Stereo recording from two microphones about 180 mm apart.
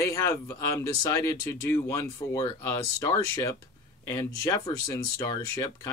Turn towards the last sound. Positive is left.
turn(degrees=20)  # may be behind; listen again after turning